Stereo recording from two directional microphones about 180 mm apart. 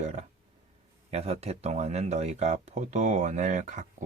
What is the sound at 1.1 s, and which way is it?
Speech, 35° right (ahead or behind).